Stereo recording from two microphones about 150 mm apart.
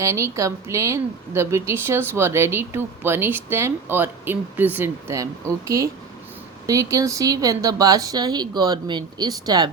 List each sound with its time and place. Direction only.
0.0 s a woman's voice: 20° right (ahead or behind)